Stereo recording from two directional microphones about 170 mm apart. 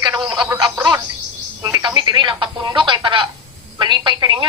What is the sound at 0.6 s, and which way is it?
A woman's voice, 25° right (ahead or behind).